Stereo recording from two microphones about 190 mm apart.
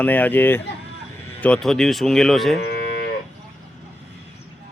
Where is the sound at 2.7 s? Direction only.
55° left (ahead or behind).